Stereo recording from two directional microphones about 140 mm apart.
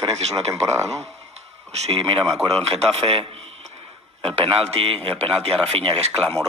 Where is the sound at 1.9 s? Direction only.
40° right (ahead or behind).